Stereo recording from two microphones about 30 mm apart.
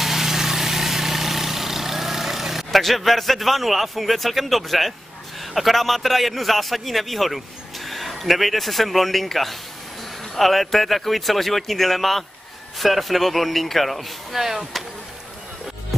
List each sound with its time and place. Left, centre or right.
0.0 s vehicle: centre
5.4 s a man's voice: centre
14.4 s speech: centre